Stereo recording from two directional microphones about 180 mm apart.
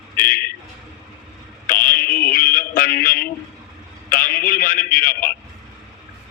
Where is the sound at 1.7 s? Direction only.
50° left (ahead or behind).